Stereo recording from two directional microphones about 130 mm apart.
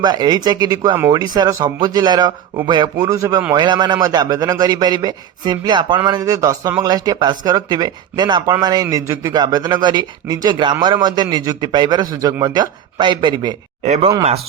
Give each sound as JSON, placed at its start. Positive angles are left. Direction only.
{"t": 0.0, "sound": "a man's voice", "side_deg": -30}
{"t": 13.8, "sound": "speech", "side_deg": -55}